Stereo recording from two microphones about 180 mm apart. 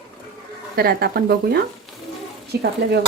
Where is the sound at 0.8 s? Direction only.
60° right (ahead or behind).